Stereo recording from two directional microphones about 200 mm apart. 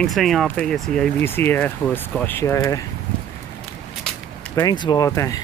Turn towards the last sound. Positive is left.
turn(degrees=15)  # may be behind; listen again after turning